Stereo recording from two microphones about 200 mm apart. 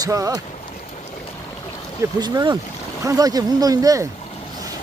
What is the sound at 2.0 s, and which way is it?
Speech, 20° right (ahead or behind).